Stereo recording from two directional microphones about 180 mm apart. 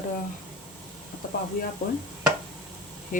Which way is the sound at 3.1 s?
50° left (ahead or behind).